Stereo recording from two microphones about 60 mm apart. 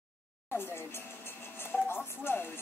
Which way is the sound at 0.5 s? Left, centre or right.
Left.